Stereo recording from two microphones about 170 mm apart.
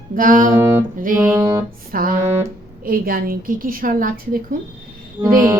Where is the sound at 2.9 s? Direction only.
60° right (ahead or behind).